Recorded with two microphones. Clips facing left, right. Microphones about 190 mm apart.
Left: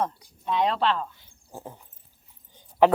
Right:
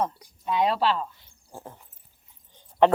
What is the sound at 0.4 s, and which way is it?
Speech, 5° right (ahead or behind).